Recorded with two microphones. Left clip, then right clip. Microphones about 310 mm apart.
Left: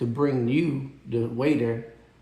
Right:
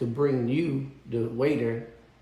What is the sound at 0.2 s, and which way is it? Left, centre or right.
Speech, left.